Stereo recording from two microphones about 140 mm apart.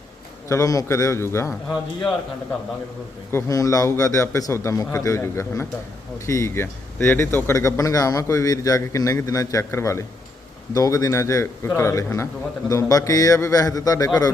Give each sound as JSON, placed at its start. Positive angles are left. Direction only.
{"t": 0.4, "sound": "speech", "side_deg": 20}
{"t": 3.3, "sound": "speech", "side_deg": 25}